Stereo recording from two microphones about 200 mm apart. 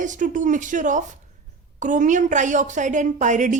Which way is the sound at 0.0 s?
40° right (ahead or behind).